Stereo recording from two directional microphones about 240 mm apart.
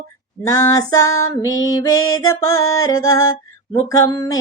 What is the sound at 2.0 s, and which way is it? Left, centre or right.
Music, left.